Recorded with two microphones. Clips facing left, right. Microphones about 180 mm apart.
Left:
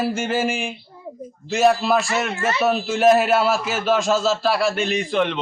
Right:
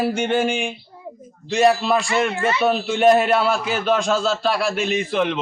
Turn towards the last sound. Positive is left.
turn(degrees=0)  # may be behind; listen again after turning